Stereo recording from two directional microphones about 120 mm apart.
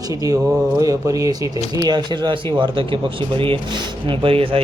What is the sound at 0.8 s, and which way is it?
A man's voice, 30° right (ahead or behind).